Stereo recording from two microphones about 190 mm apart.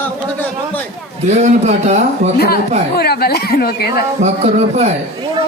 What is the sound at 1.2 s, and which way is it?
A man's voice, 35° right (ahead or behind).